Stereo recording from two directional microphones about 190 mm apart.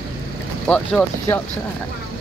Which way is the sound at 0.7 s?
5° left (ahead or behind).